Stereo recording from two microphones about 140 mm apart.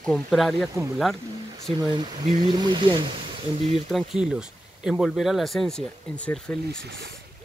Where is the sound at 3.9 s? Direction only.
Centre (ahead or behind).